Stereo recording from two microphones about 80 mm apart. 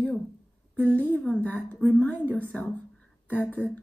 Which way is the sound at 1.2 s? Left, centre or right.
Centre.